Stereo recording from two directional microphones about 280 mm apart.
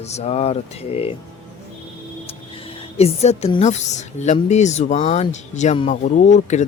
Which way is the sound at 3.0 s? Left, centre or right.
Left.